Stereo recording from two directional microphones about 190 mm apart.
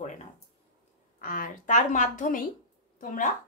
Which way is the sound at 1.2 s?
45° left (ahead or behind).